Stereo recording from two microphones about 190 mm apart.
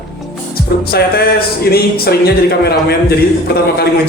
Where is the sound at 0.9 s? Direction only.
55° left (ahead or behind).